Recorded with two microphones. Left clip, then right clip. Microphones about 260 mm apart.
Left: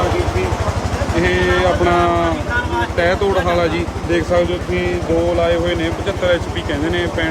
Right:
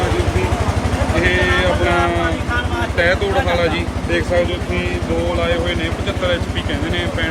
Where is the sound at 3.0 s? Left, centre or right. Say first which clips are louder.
Even; left.